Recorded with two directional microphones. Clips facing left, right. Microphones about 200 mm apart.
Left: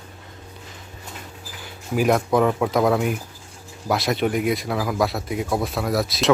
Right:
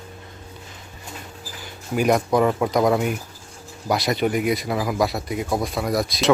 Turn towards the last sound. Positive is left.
turn(degrees=0)  # may be behind; listen again after turning